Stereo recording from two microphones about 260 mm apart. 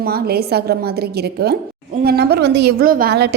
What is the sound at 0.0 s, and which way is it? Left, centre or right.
A woman's voice, right.